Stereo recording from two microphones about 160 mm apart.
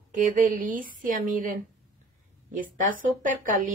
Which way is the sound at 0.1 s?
55° right (ahead or behind).